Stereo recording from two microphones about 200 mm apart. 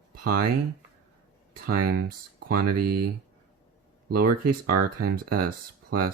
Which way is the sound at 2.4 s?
50° right (ahead or behind).